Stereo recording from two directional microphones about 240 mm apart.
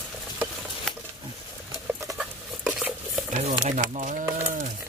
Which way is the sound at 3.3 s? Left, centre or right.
Right.